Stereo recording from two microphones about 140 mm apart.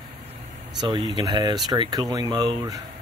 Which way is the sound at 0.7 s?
35° right (ahead or behind).